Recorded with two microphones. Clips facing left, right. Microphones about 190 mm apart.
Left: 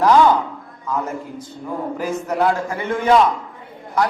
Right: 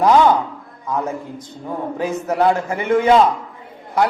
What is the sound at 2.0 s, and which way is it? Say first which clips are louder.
A man's voice: right 2 dB; 20° right (ahead or behind).